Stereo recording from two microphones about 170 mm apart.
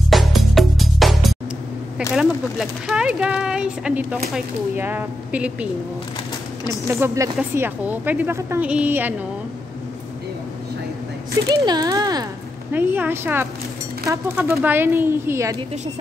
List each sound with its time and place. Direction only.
0.1 s music: centre (ahead or behind)
2.1 s a woman's voice: 5° right (ahead or behind)
6.9 s a woman's voice: 15° right (ahead or behind)
11.4 s speech: 25° right (ahead or behind)
12.7 s a woman's voice: 10° right (ahead or behind)